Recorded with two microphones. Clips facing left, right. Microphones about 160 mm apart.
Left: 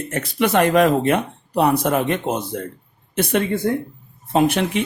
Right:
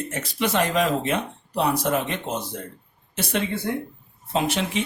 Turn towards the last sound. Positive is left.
turn(degrees=55)  # may be behind; listen again after turning